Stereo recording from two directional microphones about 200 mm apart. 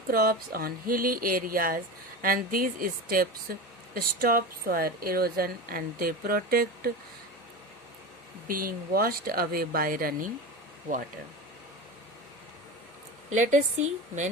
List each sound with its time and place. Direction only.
0.1 s speech: 45° right (ahead or behind)
8.4 s speech: 45° right (ahead or behind)
13.3 s a woman's voice: 40° right (ahead or behind)